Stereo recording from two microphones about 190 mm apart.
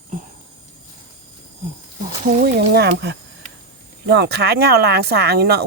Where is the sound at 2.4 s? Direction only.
60° right (ahead or behind).